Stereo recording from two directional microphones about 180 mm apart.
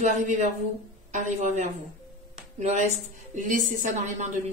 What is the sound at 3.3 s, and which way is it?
Speech, 45° right (ahead or behind).